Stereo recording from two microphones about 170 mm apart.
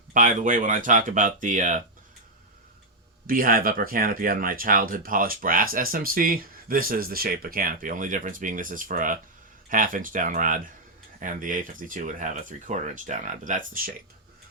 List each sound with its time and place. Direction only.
0.1 s speech: 50° right (ahead or behind)
3.2 s speech: 55° right (ahead or behind)